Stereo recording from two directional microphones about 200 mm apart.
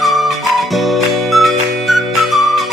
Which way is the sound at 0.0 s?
Centre (ahead or behind).